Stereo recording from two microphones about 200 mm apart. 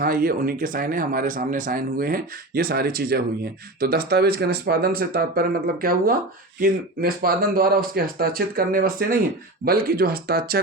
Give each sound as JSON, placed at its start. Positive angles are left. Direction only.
{"t": 0.0, "sound": "speech", "side_deg": -45}